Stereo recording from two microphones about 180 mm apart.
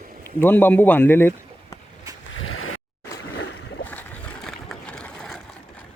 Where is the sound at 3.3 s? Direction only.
70° left (ahead or behind).